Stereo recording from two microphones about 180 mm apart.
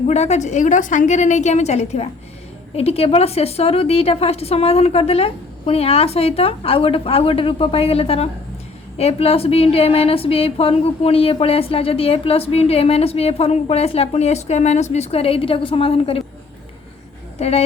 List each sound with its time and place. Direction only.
0.1 s a woman's voice: 40° left (ahead or behind)